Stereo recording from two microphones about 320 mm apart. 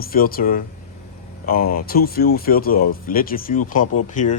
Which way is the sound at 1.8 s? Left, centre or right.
Left.